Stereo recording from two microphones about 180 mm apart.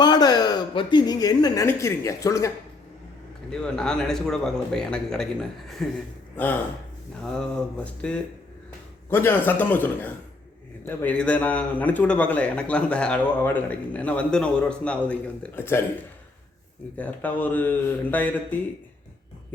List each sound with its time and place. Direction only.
0.0 s a woman's voice: 25° left (ahead or behind)
3.5 s a man's voice: 5° left (ahead or behind)
7.9 s a man's voice: 5° left (ahead or behind)
17.0 s a man's voice: 10° left (ahead or behind)